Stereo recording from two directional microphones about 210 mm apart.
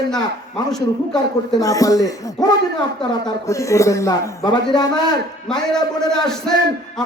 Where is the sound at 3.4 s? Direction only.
15° left (ahead or behind).